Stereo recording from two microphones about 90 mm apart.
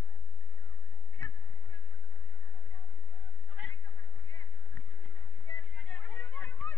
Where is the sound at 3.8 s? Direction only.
55° left (ahead or behind).